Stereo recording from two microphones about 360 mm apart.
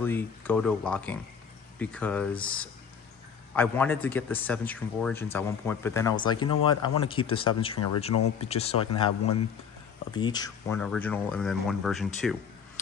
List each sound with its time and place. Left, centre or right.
0.0 s a man's voice: centre
9.2 s speech: left
10.1 s a man's voice: centre